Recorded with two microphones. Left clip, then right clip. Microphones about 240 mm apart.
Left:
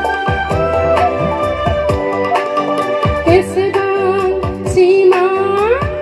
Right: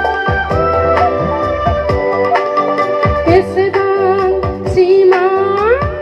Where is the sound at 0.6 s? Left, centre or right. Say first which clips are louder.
Right 1 dB; left.